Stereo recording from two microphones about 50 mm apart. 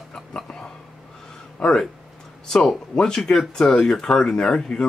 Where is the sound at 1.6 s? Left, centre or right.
Left.